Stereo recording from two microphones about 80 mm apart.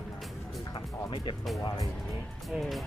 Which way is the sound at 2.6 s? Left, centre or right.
Centre.